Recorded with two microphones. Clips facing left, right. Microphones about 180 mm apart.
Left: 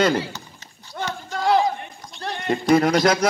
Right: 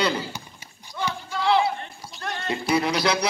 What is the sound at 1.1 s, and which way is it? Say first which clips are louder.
Run: left 2 dB; 45° left (ahead or behind).